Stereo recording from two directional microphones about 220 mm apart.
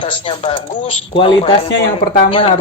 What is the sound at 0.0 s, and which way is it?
Speech, 25° left (ahead or behind).